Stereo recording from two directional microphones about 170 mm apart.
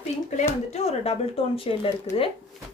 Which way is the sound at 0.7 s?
40° left (ahead or behind).